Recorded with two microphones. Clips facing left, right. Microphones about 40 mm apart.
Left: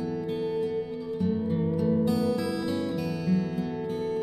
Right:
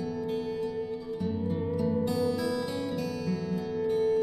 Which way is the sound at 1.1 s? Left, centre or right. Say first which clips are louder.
Left 5 dB; centre.